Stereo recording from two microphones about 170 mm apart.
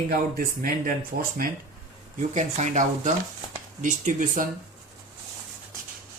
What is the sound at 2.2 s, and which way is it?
Speech, 45° right (ahead or behind).